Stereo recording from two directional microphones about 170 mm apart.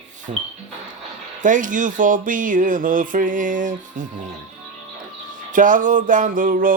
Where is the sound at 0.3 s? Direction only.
40° right (ahead or behind).